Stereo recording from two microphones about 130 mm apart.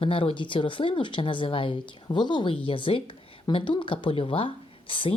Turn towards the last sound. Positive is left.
turn(degrees=40)  # may be behind; listen again after turning